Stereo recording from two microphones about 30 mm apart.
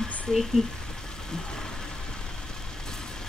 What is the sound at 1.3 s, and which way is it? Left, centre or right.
Vehicle, left.